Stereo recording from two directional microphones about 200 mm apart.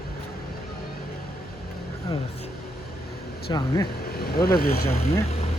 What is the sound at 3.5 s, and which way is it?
Speech, 20° left (ahead or behind).